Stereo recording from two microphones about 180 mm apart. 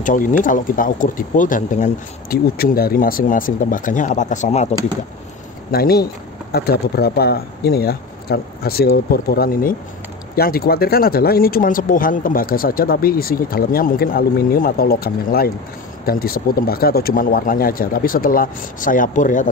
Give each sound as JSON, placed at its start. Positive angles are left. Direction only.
{"t": 0.0, "sound": "speech", "side_deg": 45}
{"t": 5.7, "sound": "speech", "side_deg": 60}